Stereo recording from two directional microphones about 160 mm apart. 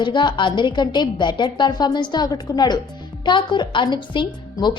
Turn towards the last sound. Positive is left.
turn(degrees=30)  # may be behind; listen again after turning